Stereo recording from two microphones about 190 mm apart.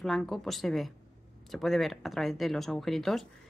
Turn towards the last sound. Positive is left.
turn(degrees=0)  # may be behind; listen again after turning